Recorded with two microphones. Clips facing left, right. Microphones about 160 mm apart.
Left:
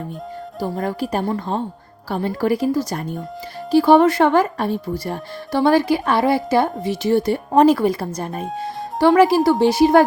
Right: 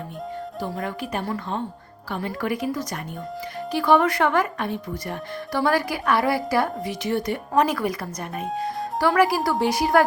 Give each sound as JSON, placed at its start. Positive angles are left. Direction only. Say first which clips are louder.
{"t": 0.6, "sound": "speech", "louder": "left 7 dB", "side_deg": 35}